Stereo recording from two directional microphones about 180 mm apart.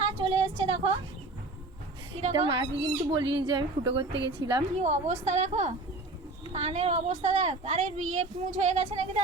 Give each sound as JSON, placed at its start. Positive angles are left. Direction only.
{"t": 0.0, "sound": "a sound", "side_deg": -30}
{"t": 2.3, "sound": "speech", "side_deg": -25}
{"t": 4.8, "sound": "speech", "side_deg": -40}